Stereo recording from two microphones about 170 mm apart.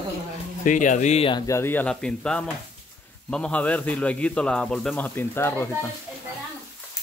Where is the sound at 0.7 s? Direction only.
50° left (ahead or behind).